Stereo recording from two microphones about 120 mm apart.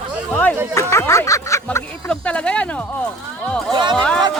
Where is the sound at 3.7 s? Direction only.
40° right (ahead or behind).